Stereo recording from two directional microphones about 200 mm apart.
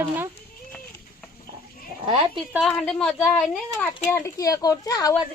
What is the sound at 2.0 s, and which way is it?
Speech, 25° right (ahead or behind).